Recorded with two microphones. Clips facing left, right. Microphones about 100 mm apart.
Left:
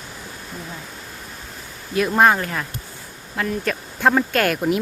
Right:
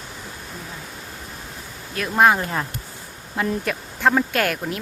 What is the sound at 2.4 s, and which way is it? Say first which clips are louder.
Speech: right 1 dB; 20° right (ahead or behind).